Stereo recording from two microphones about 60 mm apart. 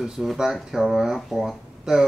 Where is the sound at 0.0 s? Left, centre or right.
Centre.